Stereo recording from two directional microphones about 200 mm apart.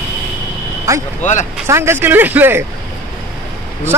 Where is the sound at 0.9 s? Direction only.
15° right (ahead or behind).